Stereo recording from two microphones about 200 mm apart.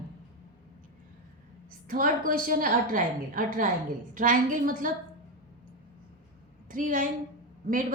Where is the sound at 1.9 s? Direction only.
45° right (ahead or behind).